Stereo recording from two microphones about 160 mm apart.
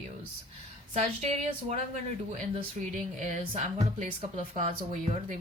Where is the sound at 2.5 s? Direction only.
50° right (ahead or behind).